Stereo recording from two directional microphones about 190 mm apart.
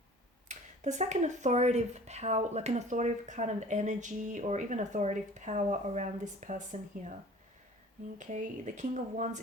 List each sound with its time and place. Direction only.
0.4 s speech: 40° right (ahead or behind)
8.2 s speech: 40° right (ahead or behind)